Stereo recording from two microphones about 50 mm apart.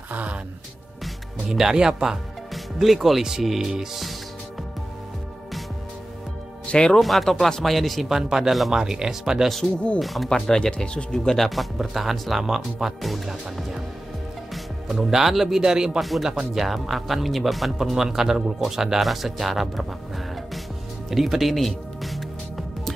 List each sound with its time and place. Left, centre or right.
0.1 s speech: right
1.0 s speech: centre
2.5 s speech: centre
6.7 s speech: centre
7.0 s speech: centre
9.9 s speech: centre
10.5 s speech: centre
11.1 s speech: centre
16.0 s speech: centre
21.1 s music: centre